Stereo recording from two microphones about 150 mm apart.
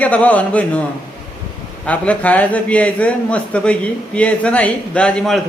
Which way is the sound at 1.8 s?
10° left (ahead or behind).